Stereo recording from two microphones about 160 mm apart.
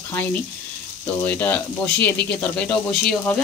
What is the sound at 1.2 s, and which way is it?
Speech, 10° left (ahead or behind).